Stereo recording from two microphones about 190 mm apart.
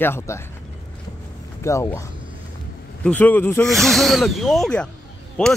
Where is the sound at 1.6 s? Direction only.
15° left (ahead or behind).